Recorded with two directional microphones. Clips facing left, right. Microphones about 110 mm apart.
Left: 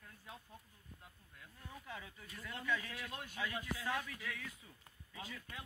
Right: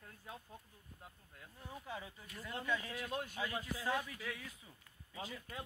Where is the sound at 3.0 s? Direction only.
35° right (ahead or behind).